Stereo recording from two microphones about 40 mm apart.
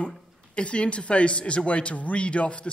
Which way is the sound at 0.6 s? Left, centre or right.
Left.